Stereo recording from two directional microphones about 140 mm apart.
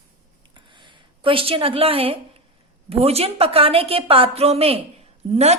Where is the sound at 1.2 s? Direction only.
40° right (ahead or behind).